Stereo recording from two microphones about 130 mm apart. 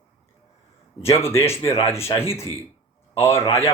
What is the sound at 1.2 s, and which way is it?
Speech, 20° left (ahead or behind).